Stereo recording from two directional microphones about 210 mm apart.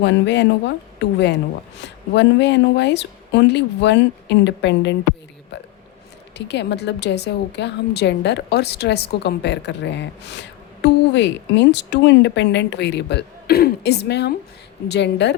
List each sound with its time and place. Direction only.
0.0 s a woman's voice: 55° left (ahead or behind)
6.3 s a woman's voice: 55° left (ahead or behind)